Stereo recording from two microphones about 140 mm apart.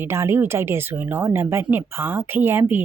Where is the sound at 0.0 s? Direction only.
20° right (ahead or behind).